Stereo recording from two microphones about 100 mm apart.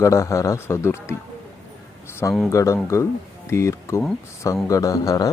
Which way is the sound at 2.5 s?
30° left (ahead or behind).